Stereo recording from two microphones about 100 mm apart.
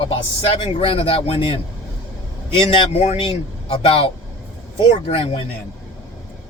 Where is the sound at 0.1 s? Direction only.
70° left (ahead or behind).